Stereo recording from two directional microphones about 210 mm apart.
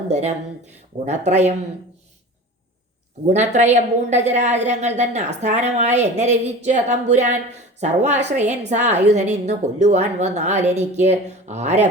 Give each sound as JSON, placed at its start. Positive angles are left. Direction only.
{"t": 0.1, "sound": "a woman's voice", "side_deg": -30}
{"t": 3.3, "sound": "a woman's voice", "side_deg": -35}